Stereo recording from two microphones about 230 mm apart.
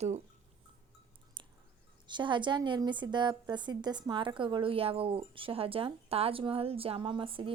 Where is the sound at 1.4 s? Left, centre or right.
Right.